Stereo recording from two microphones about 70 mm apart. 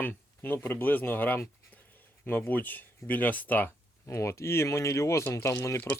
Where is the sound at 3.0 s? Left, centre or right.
Left.